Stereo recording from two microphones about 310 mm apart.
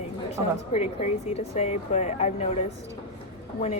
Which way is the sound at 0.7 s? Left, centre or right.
Centre.